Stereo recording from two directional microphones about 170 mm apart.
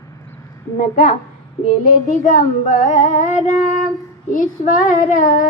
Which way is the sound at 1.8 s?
50° left (ahead or behind).